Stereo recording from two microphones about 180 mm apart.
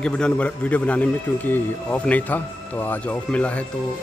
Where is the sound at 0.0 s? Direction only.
5° left (ahead or behind).